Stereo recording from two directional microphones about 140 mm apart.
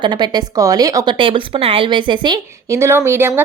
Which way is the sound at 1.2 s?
40° right (ahead or behind).